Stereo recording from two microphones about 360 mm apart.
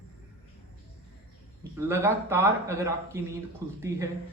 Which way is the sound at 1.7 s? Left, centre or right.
Centre.